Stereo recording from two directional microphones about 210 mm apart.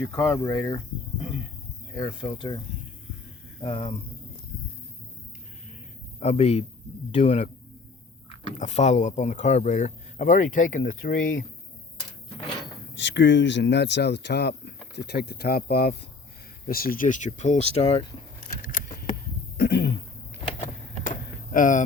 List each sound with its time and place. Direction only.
0.1 s speech: 15° left (ahead or behind)
2.0 s speech: 20° left (ahead or behind)
3.6 s speech: 25° left (ahead or behind)
6.1 s speech: 30° left (ahead or behind)
8.5 s speech: 35° left (ahead or behind)
13.0 s speech: 60° left (ahead or behind); by 18.0 s 30° left (ahead or behind)
19.5 s cough: 50° left (ahead or behind)
20.6 s a sound: 40° left (ahead or behind)